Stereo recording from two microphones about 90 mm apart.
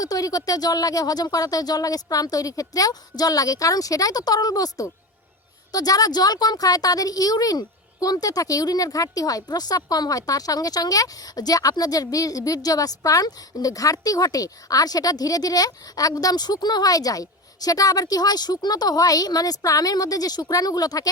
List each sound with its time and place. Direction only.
0.0 s a woman's voice: 40° left (ahead or behind)